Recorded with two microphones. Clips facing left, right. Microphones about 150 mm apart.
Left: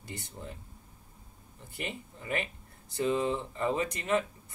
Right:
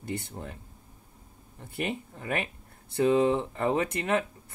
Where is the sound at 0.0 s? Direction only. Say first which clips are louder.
Right 7 dB; 60° right (ahead or behind).